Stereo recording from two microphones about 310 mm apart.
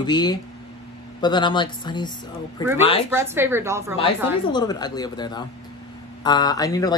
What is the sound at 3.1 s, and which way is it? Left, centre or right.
Speech, centre.